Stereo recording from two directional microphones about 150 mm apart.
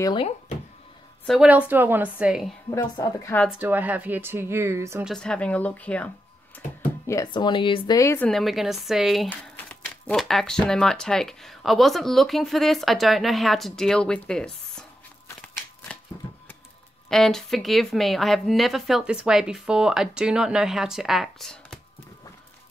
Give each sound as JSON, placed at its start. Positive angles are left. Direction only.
{"t": 0.0, "sound": "speech", "side_deg": 30}
{"t": 1.2, "sound": "a woman's voice", "side_deg": 0}
{"t": 1.5, "sound": "speech", "side_deg": -10}
{"t": 2.7, "sound": "a woman's voice", "side_deg": 25}
{"t": 3.4, "sound": "speech", "side_deg": -10}
{"t": 5.0, "sound": "speech", "side_deg": 5}
{"t": 7.2, "sound": "speech", "side_deg": 30}
{"t": 8.0, "sound": "speech", "side_deg": 15}
{"t": 8.3, "sound": "speech", "side_deg": 0}
{"t": 15.9, "sound": "shuffling cards", "side_deg": 5}
{"t": 17.1, "sound": "speech", "side_deg": 5}